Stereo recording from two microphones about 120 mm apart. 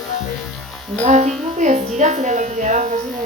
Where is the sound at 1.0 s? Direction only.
80° right.